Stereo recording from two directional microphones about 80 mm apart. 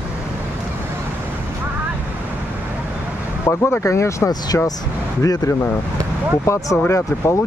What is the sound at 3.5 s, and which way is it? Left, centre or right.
Speech, left.